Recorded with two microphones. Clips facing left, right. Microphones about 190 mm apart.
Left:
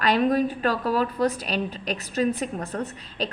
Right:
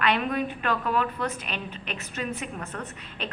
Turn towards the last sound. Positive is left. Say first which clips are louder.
# left 6 dB
turn(degrees=35)  # may be behind; listen again after turning